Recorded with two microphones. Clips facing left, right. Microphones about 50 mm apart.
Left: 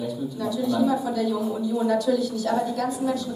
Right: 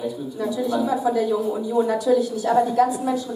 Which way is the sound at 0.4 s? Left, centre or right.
Centre.